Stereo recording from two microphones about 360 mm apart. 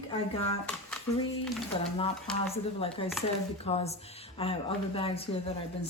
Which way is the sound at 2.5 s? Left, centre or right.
Centre.